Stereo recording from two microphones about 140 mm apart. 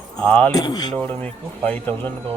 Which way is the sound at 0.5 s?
30° left (ahead or behind).